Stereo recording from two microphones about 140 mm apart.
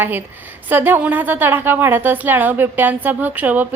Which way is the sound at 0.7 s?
15° right (ahead or behind).